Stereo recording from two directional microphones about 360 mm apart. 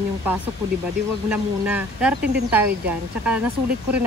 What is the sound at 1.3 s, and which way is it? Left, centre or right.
Speech, centre.